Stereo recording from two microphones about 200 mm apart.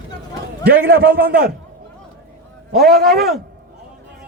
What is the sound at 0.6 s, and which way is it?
Speech, 55° right (ahead or behind).